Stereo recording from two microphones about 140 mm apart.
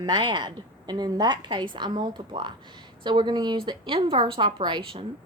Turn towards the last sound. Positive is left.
turn(degrees=-40)  # may be behind; listen again after turning